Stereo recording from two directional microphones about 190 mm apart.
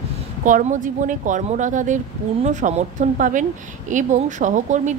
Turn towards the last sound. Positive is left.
turn(degrees=-40)  # may be behind; listen again after turning